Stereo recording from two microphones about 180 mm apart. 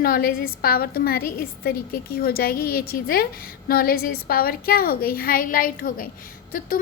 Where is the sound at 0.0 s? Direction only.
55° left (ahead or behind).